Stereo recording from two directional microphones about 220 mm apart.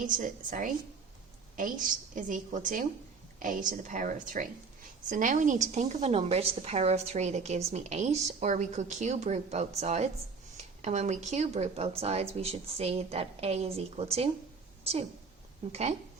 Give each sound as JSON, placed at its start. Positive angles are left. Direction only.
{"t": 0.0, "sound": "speech", "side_deg": -35}
{"t": 15.7, "sound": "speech", "side_deg": -30}